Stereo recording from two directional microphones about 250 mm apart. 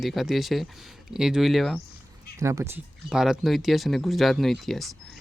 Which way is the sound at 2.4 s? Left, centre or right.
Centre.